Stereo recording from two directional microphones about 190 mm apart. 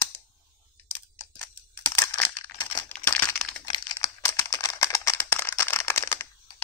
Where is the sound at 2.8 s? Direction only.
10° left (ahead or behind).